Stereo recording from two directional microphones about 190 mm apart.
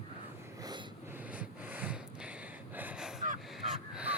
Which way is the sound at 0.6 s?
20° right (ahead or behind).